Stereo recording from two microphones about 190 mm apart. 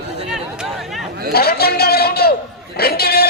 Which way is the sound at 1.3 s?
55° left (ahead or behind).